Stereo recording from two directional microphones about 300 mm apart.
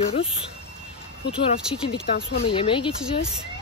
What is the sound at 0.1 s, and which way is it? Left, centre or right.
Speech, centre.